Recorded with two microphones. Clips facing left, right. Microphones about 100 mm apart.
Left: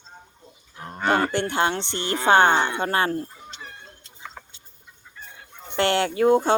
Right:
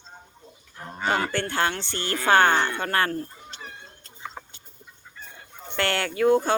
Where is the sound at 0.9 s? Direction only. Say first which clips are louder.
Left 4 dB; 50° left (ahead or behind).